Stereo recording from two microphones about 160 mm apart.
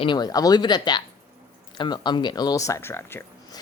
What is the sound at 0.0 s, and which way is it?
Speech, 25° left (ahead or behind).